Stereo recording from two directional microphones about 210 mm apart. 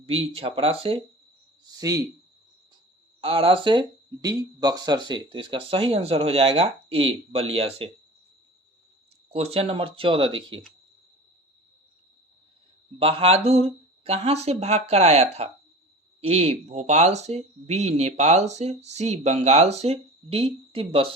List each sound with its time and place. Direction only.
0.0 s speech: 25° right (ahead or behind)
3.2 s speech: 25° right (ahead or behind)
9.3 s speech: 30° right (ahead or behind)
13.0 s speech: 25° right (ahead or behind)